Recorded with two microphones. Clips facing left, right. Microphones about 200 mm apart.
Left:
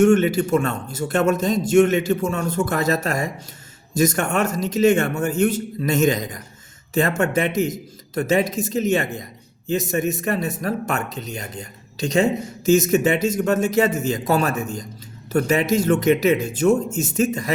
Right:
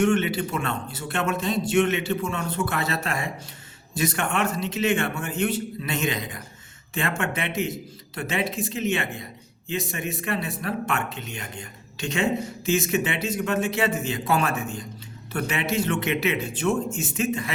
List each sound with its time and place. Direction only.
0.0 s a man's voice: 45° left (ahead or behind)